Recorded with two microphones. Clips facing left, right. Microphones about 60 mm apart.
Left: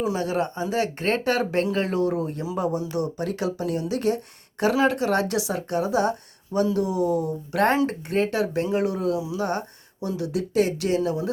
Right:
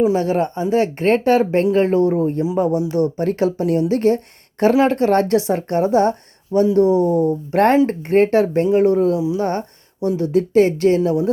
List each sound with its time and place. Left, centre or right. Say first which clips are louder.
0.0 s speech: right 8 dB; right